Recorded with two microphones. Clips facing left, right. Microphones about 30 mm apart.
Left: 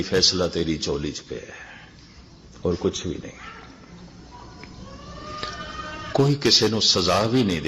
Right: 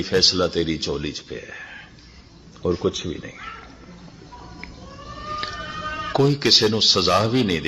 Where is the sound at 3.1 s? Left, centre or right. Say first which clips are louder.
Right 1 dB; right.